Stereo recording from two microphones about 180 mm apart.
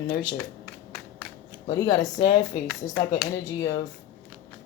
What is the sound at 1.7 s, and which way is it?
Speech, 20° left (ahead or behind).